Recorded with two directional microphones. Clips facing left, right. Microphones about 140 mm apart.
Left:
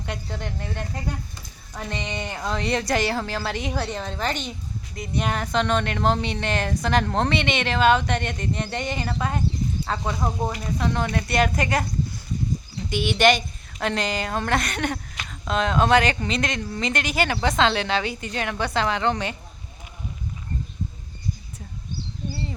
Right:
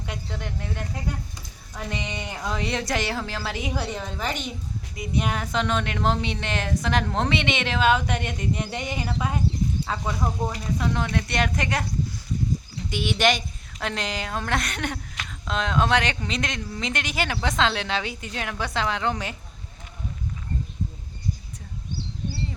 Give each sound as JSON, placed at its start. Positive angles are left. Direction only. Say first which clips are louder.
{"t": 0.0, "sound": "a woman's voice", "louder": "left 2 dB", "side_deg": 0}
{"t": 10.0, "sound": "speech", "louder": "left 1 dB", "side_deg": 20}
{"t": 10.8, "sound": "a woman's voice", "louder": "left 1 dB", "side_deg": 0}
{"t": 12.9, "sound": "a woman's voice", "louder": "left 4 dB", "side_deg": 0}